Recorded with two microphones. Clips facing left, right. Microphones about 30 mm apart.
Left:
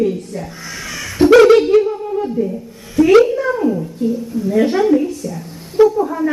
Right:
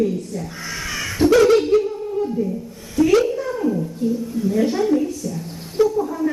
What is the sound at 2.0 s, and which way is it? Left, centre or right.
Humming, left.